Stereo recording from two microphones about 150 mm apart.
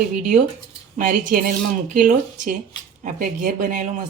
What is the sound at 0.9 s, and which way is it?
A woman's voice, 70° right (ahead or behind).